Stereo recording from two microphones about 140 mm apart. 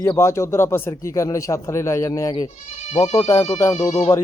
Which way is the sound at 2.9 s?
45° left (ahead or behind).